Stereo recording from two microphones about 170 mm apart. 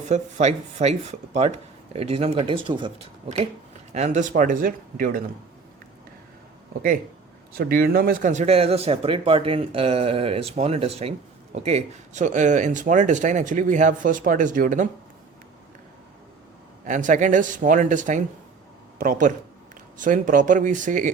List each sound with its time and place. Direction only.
0.1 s speech: 40° right (ahead or behind)
7.5 s speech: 60° right (ahead or behind)
16.8 s speech: 50° right (ahead or behind)